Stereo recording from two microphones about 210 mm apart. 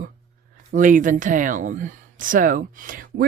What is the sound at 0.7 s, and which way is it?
Speech, 40° right (ahead or behind).